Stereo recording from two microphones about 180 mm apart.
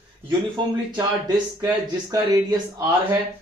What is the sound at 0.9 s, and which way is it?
Speech, 25° right (ahead or behind).